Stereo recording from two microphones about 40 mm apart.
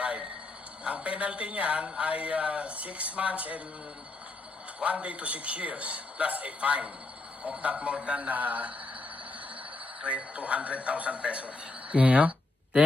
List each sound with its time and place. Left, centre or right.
0.9 s speech: right
4.8 s speech: right
8.3 s a man's voice: right
10.0 s speech: right